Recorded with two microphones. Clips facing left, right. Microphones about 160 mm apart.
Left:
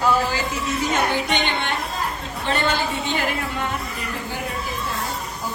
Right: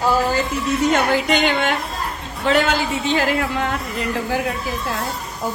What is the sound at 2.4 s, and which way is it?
Speech, 80° right.